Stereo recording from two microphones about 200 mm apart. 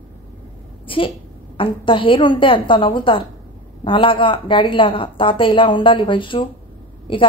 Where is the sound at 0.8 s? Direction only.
25° left (ahead or behind).